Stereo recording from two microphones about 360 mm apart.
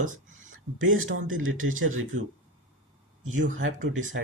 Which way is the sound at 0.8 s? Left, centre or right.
Right.